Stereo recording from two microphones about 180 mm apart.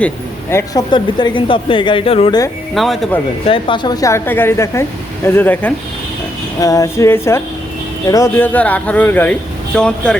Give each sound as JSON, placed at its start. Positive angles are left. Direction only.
{"t": 0.5, "sound": "speech", "side_deg": 20}
{"t": 2.7, "sound": "speech", "side_deg": 0}
{"t": 3.4, "sound": "speech", "side_deg": 30}